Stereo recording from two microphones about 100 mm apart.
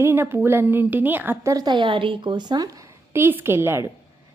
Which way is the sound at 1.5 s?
40° right (ahead or behind).